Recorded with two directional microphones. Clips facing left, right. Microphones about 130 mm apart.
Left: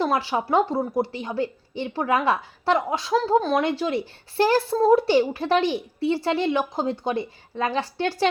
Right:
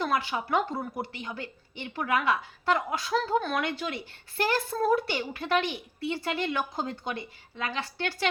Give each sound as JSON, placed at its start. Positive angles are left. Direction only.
{"t": 0.0, "sound": "a child's voice", "side_deg": 30}